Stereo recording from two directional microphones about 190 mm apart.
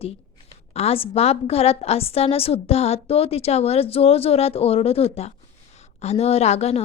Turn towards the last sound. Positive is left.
turn(degrees=35)  # may be behind; listen again after turning